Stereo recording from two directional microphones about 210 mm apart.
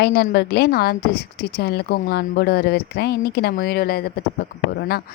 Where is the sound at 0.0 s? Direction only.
50° left (ahead or behind).